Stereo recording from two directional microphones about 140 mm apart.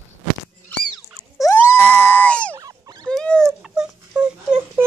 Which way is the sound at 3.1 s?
5° left (ahead or behind).